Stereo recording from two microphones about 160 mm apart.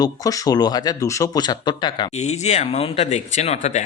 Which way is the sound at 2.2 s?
45° left (ahead or behind).